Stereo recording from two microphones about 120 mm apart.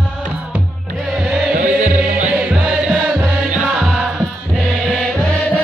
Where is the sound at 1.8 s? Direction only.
90° right.